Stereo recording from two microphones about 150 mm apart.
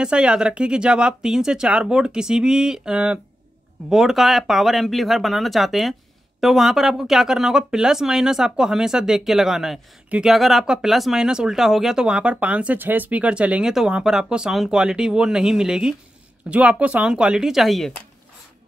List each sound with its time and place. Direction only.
0.0 s speech: 5° right (ahead or behind)